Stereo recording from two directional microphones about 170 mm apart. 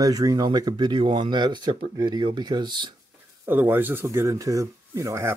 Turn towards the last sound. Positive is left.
turn(degrees=-15)  # may be behind; listen again after turning